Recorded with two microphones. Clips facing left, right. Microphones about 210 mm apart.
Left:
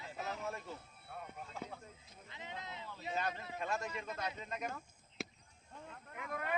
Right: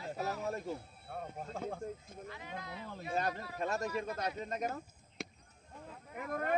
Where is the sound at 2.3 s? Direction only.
20° left (ahead or behind).